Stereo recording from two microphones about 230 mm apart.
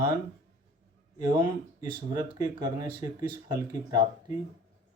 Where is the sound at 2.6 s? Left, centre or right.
Centre.